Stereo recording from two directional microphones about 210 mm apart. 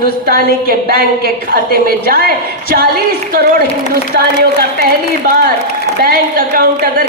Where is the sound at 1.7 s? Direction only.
45° right (ahead or behind).